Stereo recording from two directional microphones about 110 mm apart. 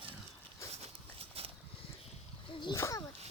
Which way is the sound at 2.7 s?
25° left (ahead or behind).